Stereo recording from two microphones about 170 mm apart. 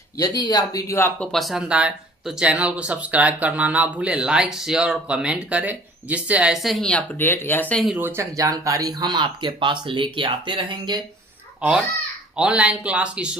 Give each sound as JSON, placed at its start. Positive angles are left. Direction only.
{"t": 0.2, "sound": "speech", "side_deg": 25}
{"t": 1.3, "sound": "speech", "side_deg": 0}
{"t": 7.9, "sound": "speech", "side_deg": -15}
{"t": 11.6, "sound": "speech", "side_deg": -10}